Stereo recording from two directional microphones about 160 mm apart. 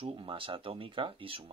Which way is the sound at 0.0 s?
35° right (ahead or behind).